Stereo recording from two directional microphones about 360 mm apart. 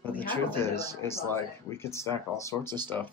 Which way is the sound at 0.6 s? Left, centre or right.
Centre.